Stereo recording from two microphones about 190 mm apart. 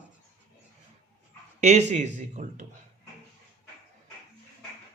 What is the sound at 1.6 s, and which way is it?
Speech, 35° right (ahead or behind).